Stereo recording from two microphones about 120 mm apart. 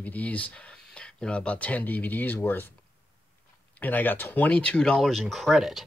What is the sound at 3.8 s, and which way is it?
Speech, 15° left (ahead or behind).